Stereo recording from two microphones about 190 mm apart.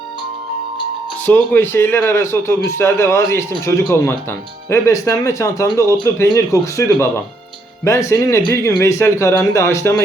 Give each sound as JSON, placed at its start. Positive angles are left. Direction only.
{"t": 1.2, "sound": "speech", "side_deg": 10}